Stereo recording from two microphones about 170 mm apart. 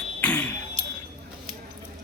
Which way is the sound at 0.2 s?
10° left (ahead or behind).